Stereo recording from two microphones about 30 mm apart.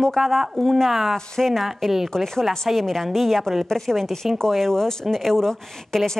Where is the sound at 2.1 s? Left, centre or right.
Centre.